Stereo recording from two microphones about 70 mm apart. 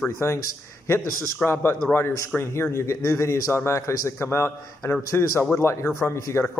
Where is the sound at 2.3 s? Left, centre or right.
Centre.